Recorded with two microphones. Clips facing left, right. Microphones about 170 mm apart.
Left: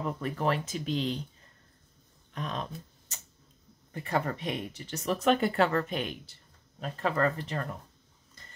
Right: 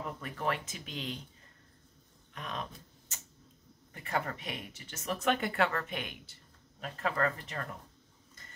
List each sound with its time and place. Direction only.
0.0 s speech: 35° left (ahead or behind)
2.3 s speech: 35° left (ahead or behind)